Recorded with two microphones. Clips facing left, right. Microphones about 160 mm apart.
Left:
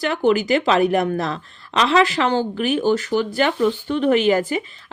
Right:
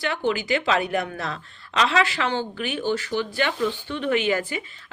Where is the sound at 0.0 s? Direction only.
40° left (ahead or behind).